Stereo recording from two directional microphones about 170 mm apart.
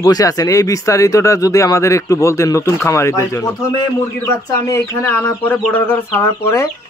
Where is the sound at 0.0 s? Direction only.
20° left (ahead or behind).